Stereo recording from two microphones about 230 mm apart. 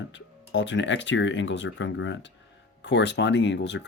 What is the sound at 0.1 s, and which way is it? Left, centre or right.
Speech, left.